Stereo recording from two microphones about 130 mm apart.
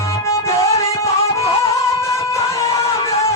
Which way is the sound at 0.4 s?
20° left (ahead or behind).